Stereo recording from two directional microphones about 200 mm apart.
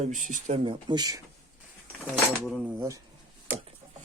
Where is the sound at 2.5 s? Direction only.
5° right (ahead or behind).